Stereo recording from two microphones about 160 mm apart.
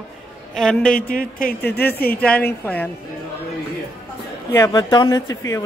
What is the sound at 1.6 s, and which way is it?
A woman's voice, 10° left (ahead or behind).